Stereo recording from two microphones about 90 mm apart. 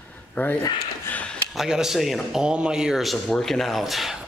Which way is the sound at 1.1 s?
10° left (ahead or behind).